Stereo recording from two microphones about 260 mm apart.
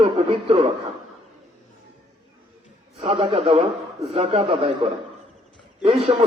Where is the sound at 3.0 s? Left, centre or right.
Right.